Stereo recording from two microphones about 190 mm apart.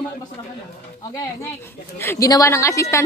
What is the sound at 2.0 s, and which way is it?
A woman's voice, 15° left (ahead or behind).